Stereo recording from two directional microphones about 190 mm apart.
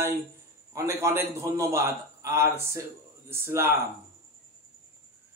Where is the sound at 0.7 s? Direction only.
15° right (ahead or behind).